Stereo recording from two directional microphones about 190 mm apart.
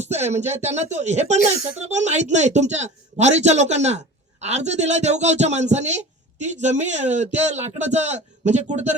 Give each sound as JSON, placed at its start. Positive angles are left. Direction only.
{"t": 0.0, "sound": "speech", "side_deg": -35}